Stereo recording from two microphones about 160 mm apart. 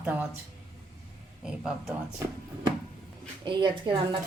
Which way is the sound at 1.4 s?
5° right (ahead or behind).